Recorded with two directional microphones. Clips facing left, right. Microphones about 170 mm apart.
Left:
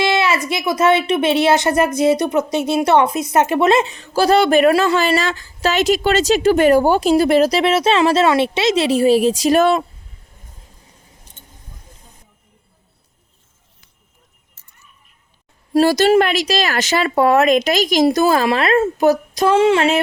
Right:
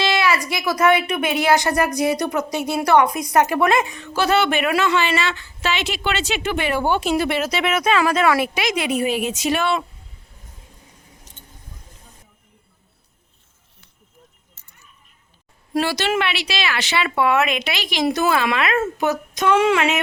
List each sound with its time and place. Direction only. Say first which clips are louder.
0.0 s a sound: left 3 dB; 20° left (ahead or behind)
0.4 s a woman's voice: left 2 dB; 20° left (ahead or behind); by 9.8 s 40° left (ahead or behind)
15.7 s a woman's voice: left 9 dB; 40° left (ahead or behind)